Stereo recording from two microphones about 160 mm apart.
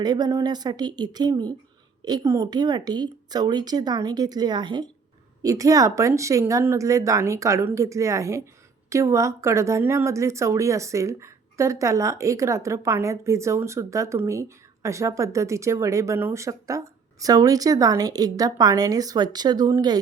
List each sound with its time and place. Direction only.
0.0 s speech: 25° right (ahead or behind)